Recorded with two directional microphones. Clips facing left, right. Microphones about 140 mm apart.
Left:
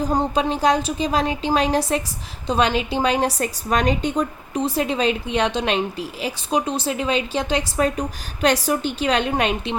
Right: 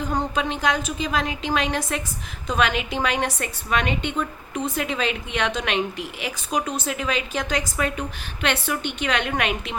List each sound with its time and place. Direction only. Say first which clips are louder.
0.0 s a woman's voice: left 4 dB; 35° left (ahead or behind)